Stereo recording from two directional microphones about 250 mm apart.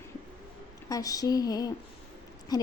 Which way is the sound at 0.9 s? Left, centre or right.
Centre.